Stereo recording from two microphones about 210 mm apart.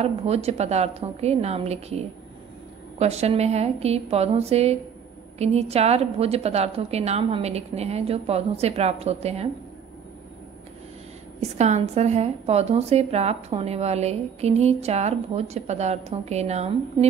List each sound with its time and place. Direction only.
0.0 s a woman's voice: 30° right (ahead or behind)
11.5 s a woman's voice: 35° right (ahead or behind)